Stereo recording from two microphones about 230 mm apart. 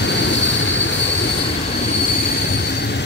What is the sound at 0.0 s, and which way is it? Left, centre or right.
Vehicle, left.